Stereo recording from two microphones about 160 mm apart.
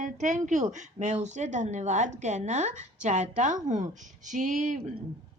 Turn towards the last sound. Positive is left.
turn(degrees=-50)  # may be behind; listen again after turning